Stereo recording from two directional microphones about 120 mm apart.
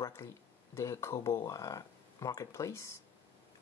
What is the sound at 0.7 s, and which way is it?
Speech, 25° left (ahead or behind).